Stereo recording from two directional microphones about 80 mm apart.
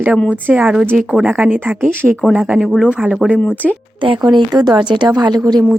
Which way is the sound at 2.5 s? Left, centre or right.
Centre.